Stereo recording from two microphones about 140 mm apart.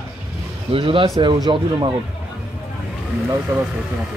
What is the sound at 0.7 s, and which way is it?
A man's voice, 40° right (ahead or behind).